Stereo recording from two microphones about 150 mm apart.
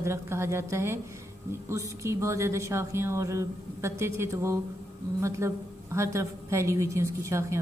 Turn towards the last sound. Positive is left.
turn(degrees=-20)  # may be behind; listen again after turning